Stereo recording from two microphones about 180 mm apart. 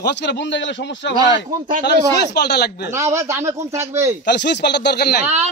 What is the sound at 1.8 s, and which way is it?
A man's voice, 65° left (ahead or behind).